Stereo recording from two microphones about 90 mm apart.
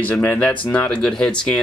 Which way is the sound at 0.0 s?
20° left (ahead or behind).